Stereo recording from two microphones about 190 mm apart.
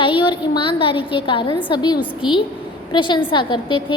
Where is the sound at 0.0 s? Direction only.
25° left (ahead or behind).